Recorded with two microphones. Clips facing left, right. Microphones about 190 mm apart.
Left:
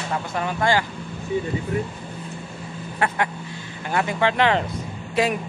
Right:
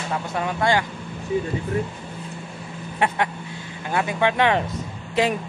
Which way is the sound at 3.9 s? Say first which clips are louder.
Even; 15° right (ahead or behind).